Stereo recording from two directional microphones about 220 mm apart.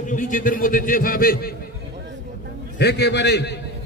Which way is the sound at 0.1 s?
35° left (ahead or behind).